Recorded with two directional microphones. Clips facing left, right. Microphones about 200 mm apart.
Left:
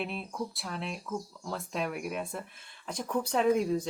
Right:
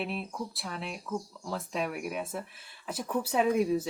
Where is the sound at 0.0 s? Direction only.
Centre (ahead or behind).